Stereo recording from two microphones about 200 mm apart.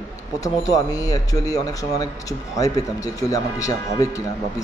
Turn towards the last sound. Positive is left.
turn(degrees=15)  # may be behind; listen again after turning